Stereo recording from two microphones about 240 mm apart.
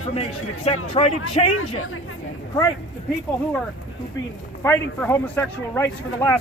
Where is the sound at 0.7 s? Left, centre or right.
Left.